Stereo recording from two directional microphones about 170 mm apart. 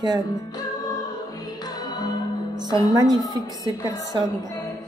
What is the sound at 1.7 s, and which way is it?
Music, 25° left (ahead or behind).